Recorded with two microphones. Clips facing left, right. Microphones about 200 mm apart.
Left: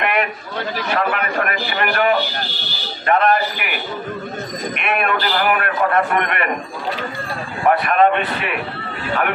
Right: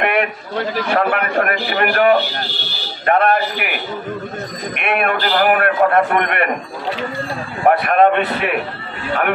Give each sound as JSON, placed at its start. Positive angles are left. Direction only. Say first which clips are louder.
{"t": 0.0, "sound": "a sound", "louder": "right 3 dB", "side_deg": -55}
{"t": 0.9, "sound": "a man's voice", "louder": "right 3 dB", "side_deg": -50}
{"t": 4.7, "sound": "a man's voice", "louder": "right 3 dB", "side_deg": -50}
{"t": 7.6, "sound": "a man's voice", "louder": "right 2 dB", "side_deg": -50}